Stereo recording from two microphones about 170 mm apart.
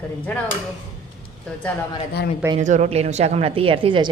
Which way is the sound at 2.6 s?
45° right (ahead or behind).